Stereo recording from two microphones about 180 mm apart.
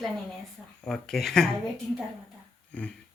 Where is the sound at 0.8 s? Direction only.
5° left (ahead or behind).